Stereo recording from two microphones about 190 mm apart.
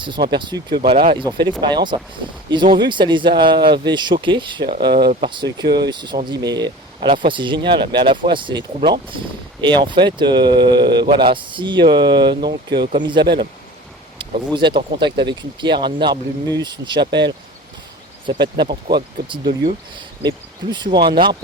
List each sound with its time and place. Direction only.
0.3 s speech: 25° right (ahead or behind)
14.5 s speech: 25° right (ahead or behind)
18.3 s speech: 25° right (ahead or behind)